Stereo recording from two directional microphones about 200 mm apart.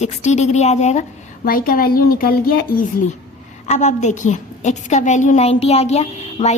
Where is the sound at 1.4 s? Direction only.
45° left (ahead or behind).